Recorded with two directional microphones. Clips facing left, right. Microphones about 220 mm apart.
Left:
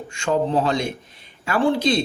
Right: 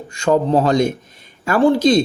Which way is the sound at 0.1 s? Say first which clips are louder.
Right 6 dB; 40° right (ahead or behind).